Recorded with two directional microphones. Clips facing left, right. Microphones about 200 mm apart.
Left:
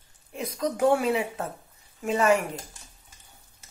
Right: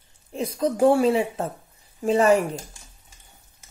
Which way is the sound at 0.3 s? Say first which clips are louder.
Right 5 dB; 30° right (ahead or behind).